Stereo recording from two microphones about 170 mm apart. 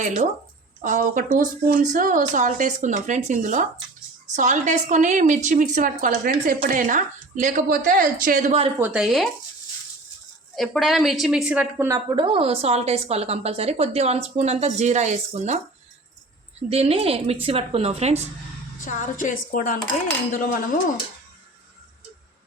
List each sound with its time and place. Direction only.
0.8 s a woman's voice: 50° right (ahead or behind)
8.8 s a woman's voice: 5° right (ahead or behind)
10.5 s a woman's voice: centre (ahead or behind)
12.0 s a woman's voice: 25° right (ahead or behind)
16.6 s a woman's voice: 35° right (ahead or behind)
18.9 s a woman's voice: 50° left (ahead or behind)